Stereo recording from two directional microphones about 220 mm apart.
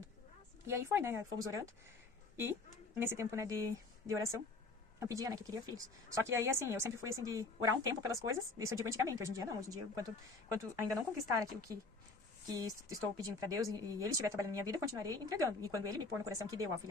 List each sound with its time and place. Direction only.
0.7 s speech: 10° right (ahead or behind)
3.0 s speech: 10° right (ahead or behind)